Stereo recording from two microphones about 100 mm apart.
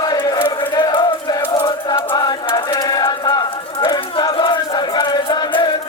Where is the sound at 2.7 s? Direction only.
40° left (ahead or behind).